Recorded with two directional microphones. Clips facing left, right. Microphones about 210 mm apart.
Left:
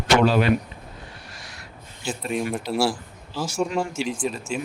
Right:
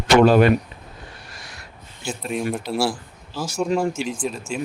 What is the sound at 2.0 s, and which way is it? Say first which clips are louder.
Speech: right 1 dB; centre (ahead or behind).